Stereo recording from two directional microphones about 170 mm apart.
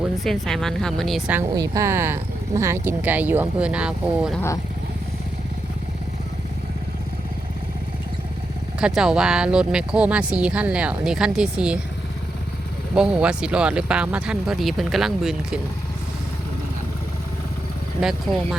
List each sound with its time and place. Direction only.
0.3 s speech: centre (ahead or behind)
1.5 s speech: 20° right (ahead or behind); by 4.3 s 5° right (ahead or behind)
4.4 s speech: 15° left (ahead or behind)
8.8 s speech: 5° right (ahead or behind)
12.9 s speech: 5° right (ahead or behind)